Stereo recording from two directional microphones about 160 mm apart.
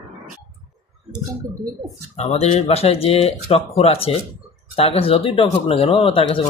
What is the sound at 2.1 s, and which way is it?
Speech, 40° left (ahead or behind).